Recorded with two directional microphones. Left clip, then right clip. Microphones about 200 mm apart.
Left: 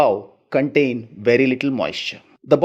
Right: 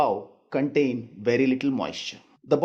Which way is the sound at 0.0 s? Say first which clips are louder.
Left 7 dB; 35° left (ahead or behind).